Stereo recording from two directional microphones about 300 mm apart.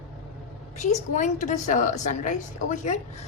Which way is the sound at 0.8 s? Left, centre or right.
Left.